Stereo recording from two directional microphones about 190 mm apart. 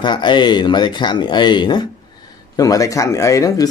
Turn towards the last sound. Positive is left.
turn(degrees=20)  # may be behind; listen again after turning